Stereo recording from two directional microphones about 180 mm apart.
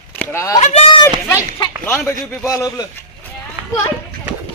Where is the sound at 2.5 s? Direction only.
20° left (ahead or behind).